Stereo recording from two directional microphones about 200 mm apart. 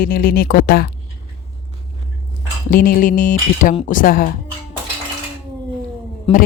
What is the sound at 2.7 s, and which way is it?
Speech, 45° left (ahead or behind).